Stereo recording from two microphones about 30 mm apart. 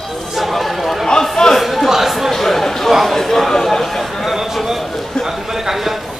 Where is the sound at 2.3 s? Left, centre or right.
Centre.